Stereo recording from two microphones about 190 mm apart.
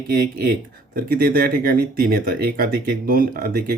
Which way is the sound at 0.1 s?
55° right (ahead or behind).